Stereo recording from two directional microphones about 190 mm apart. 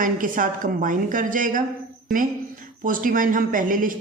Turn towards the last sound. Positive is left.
turn(degrees=-45)  # may be behind; listen again after turning